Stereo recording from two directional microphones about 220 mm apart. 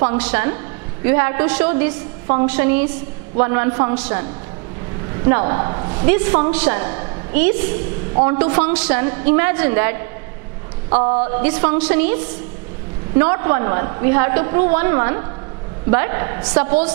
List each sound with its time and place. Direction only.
0.1 s a woman's voice: 10° right (ahead or behind)
6.1 s a woman's voice: 10° right (ahead or behind)
10.9 s a man's voice: 30° right (ahead or behind)
11.4 s a woman's voice: 10° right (ahead or behind)
13.2 s a woman's voice: 15° right (ahead or behind)